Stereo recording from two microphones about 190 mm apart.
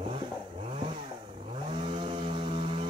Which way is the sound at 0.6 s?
30° right (ahead or behind).